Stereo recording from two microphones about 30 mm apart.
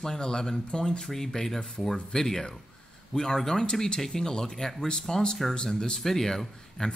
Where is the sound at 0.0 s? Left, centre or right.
Left.